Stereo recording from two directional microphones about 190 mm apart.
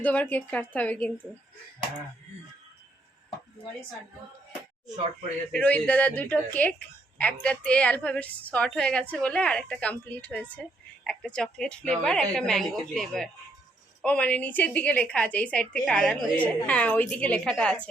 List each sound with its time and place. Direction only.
0.0 s a woman's voice: 10° left (ahead or behind)
5.5 s a woman's voice: 10° left (ahead or behind)